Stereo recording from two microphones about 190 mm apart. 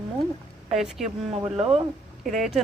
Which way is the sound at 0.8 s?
Centre (ahead or behind).